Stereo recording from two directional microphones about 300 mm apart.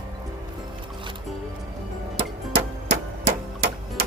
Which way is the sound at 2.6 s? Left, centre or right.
Right.